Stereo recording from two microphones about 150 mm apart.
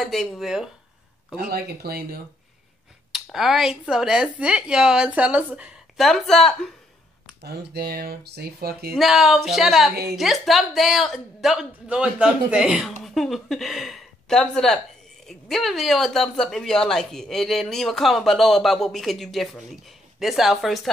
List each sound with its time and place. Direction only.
0.0 s speech: centre (ahead or behind)
1.5 s speech: 90° right
3.1 s speech: centre (ahead or behind)
7.4 s speech: 90° right
8.9 s speech: centre (ahead or behind)